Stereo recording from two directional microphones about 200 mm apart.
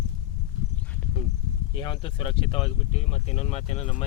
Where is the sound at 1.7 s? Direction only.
25° left (ahead or behind).